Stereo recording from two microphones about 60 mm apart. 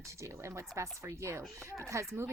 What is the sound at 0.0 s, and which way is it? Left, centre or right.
A child's voice, right.